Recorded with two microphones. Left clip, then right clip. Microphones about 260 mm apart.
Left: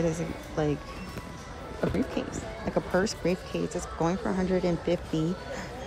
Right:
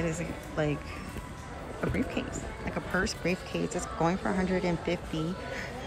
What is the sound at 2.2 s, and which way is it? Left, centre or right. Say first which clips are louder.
A woman's voice: left 2 dB; centre.